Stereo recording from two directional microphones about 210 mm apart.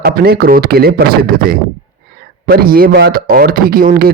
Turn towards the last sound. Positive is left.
turn(degrees=-45)  # may be behind; listen again after turning